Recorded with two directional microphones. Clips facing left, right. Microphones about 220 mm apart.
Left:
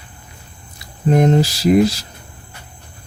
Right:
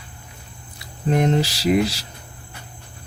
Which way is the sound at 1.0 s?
45° left (ahead or behind).